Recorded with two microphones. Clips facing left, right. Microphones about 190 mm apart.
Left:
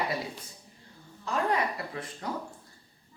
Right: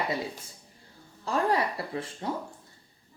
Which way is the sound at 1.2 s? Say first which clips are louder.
Right 2 dB; 30° right (ahead or behind).